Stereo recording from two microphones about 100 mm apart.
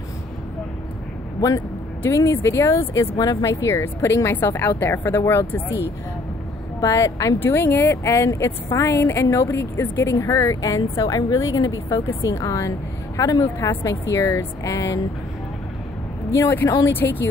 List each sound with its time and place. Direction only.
2.0 s a woman's voice: 30° left (ahead or behind)
3.2 s speech: 40° left (ahead or behind)
3.4 s a woman's voice: 25° left (ahead or behind)
6.8 s speech: 35° left (ahead or behind)
7.3 s a woman's voice: 20° left (ahead or behind)
16.3 s a woman's voice: 30° left (ahead or behind)